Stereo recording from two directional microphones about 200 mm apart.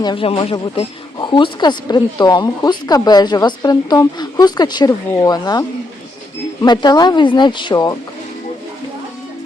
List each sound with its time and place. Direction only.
0.0 s speech: 25° left (ahead or behind)